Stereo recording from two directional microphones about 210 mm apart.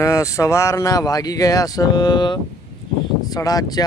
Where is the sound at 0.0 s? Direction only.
15° left (ahead or behind).